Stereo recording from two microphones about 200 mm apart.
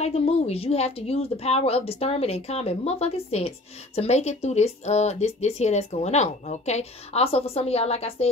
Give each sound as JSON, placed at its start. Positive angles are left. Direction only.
{"t": 0.0, "sound": "speech", "side_deg": 30}